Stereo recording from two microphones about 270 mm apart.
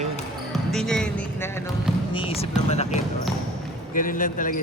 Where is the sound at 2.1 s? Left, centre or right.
Left.